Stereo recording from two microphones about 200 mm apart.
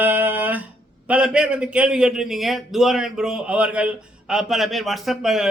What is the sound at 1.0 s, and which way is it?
A man's voice, 5° right (ahead or behind).